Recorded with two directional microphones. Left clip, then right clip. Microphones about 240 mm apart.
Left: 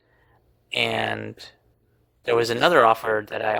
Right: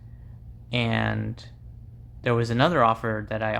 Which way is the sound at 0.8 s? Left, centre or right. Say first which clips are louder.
Left 4 dB; left.